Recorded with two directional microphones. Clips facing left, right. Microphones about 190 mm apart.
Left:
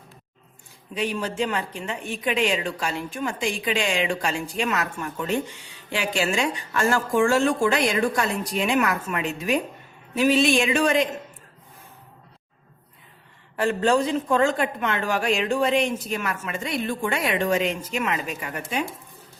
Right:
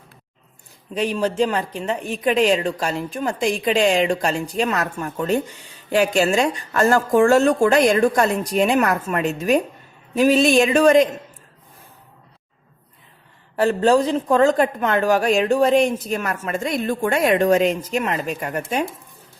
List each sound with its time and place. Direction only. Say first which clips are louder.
0.9 s a woman's voice: right 6 dB; 40° right (ahead or behind)
13.6 s speech: right 5 dB; 35° right (ahead or behind)